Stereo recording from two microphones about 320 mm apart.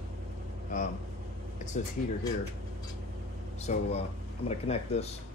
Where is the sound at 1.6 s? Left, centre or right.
Left.